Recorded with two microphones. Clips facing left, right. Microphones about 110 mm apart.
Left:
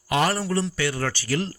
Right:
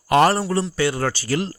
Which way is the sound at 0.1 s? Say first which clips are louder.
Right 7 dB; 50° right (ahead or behind).